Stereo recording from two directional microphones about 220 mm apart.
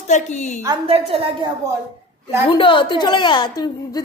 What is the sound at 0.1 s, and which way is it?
Speech, 30° left (ahead or behind).